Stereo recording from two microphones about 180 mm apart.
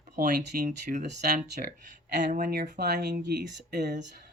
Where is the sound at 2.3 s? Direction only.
55° right (ahead or behind).